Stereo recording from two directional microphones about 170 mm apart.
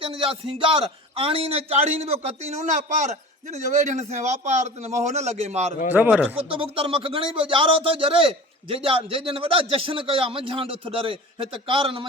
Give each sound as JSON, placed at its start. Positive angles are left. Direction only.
{"t": 0.0, "sound": "a man's voice", "side_deg": -35}
{"t": 5.9, "sound": "speech", "side_deg": -10}
{"t": 6.6, "sound": "a man's voice", "side_deg": -30}